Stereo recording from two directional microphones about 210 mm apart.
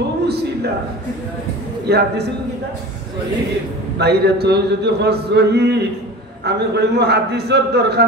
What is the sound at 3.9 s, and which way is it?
A man's voice, 50° right (ahead or behind).